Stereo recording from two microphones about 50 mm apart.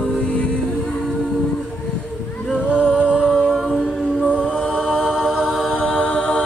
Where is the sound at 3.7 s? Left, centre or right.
Centre.